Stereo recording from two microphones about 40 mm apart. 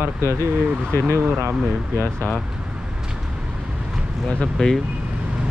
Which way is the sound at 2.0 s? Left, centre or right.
Left.